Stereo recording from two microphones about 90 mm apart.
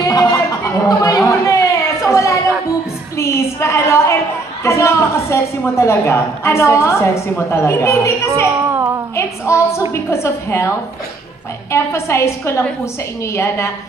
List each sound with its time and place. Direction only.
0.0 s chatter: 45° left (ahead or behind)
3.2 s a woman's voice: 30° left (ahead or behind)
8.6 s a sound: 35° right (ahead or behind)
9.1 s a woman's voice: 30° left (ahead or behind)